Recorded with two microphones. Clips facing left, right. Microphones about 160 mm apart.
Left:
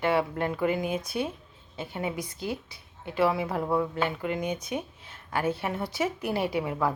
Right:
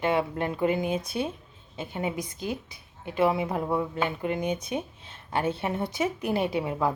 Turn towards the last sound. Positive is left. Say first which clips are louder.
# right 1 dB
turn(degrees=-20)  # may be behind; listen again after turning